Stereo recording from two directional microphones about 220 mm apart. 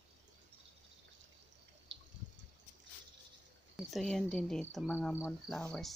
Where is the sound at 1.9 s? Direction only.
55° right (ahead or behind).